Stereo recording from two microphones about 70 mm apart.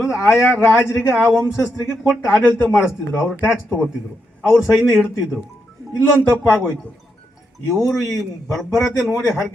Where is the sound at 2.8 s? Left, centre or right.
Centre.